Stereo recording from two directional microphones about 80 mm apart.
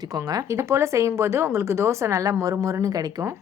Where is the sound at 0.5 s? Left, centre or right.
Right.